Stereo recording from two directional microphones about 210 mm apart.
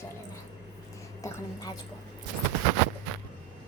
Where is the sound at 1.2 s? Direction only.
15° left (ahead or behind).